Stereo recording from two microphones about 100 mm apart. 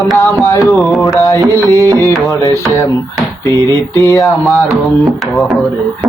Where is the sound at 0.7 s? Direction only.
Centre (ahead or behind).